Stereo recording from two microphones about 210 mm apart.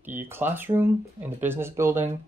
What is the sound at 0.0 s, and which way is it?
Speech, 10° right (ahead or behind).